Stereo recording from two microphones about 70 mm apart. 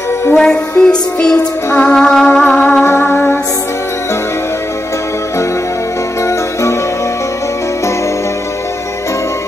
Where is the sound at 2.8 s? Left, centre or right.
Left.